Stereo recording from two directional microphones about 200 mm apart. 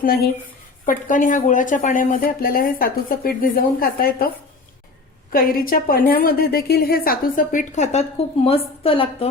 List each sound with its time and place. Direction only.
0.0 s speech: 45° left (ahead or behind)
5.3 s a woman's voice: 45° left (ahead or behind); by 9.3 s 30° left (ahead or behind)